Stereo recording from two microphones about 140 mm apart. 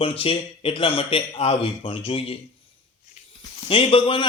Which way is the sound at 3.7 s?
40° left (ahead or behind).